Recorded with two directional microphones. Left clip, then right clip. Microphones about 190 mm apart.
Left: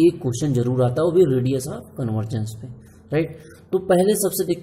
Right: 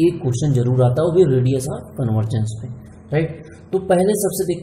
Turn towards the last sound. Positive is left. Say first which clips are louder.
# right 2 dB
turn(degrees=35)  # may be behind; listen again after turning